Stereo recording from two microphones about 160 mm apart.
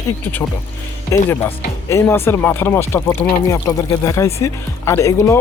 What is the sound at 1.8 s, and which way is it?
Speech, 15° left (ahead or behind).